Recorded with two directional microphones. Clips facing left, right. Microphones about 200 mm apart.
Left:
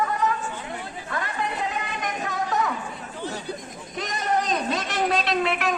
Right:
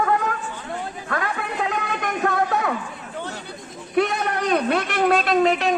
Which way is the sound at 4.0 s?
60° right (ahead or behind).